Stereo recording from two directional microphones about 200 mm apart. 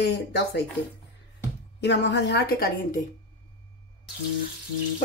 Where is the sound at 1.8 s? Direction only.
60° left (ahead or behind).